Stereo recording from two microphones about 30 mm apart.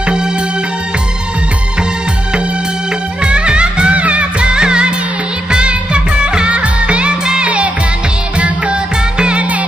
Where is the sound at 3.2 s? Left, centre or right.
Right.